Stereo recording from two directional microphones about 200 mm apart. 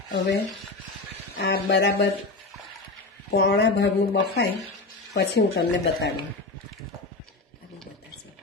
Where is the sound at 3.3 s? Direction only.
55° left (ahead or behind).